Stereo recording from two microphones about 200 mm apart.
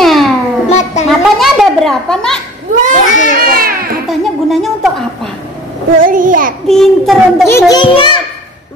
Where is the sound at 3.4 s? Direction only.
45° right (ahead or behind).